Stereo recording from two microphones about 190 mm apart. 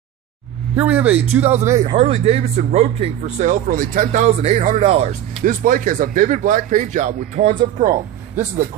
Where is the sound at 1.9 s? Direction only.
30° right (ahead or behind).